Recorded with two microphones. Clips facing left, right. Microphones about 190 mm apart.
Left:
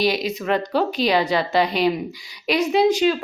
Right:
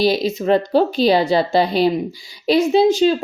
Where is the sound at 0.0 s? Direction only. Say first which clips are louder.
Right 4 dB; 30° right (ahead or behind).